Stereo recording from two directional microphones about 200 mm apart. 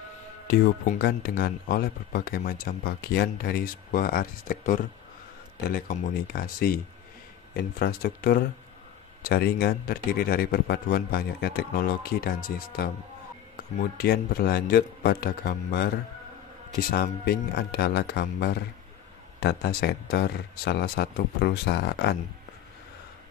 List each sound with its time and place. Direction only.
0.5 s speech: 50° left (ahead or behind)
13.9 s speech: 50° left (ahead or behind)
16.9 s speech: 50° left (ahead or behind)